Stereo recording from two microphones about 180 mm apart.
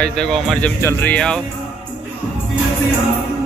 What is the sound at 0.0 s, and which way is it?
Speech, 5° left (ahead or behind).